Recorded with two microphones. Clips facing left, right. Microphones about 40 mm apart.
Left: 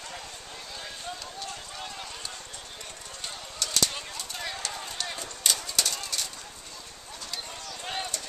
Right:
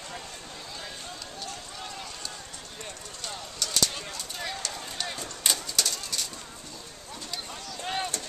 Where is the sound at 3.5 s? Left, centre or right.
Centre.